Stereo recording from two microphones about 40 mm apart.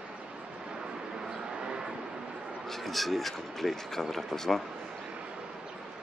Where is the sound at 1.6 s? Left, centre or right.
Right.